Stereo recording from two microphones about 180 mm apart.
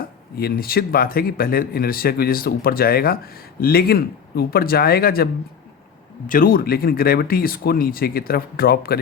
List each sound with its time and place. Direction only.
0.3 s speech: 55° left (ahead or behind)